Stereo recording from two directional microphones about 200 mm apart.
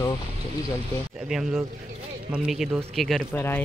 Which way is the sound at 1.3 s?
5° right (ahead or behind).